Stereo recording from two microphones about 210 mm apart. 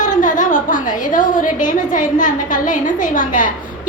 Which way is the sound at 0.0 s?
35° left (ahead or behind).